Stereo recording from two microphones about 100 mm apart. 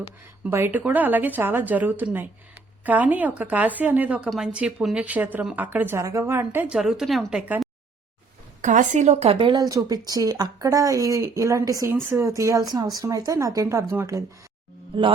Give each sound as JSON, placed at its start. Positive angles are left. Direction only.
{"t": 0.5, "sound": "speech", "side_deg": -20}
{"t": 6.0, "sound": "speech", "side_deg": -30}
{"t": 6.7, "sound": "speech", "side_deg": -5}
{"t": 9.0, "sound": "speech", "side_deg": -90}
{"t": 9.6, "sound": "speech", "side_deg": -35}
{"t": 14.9, "sound": "speech", "side_deg": -60}